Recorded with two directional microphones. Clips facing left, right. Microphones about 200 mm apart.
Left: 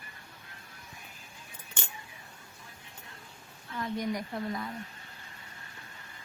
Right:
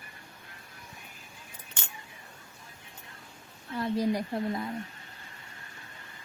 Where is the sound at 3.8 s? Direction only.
30° right (ahead or behind).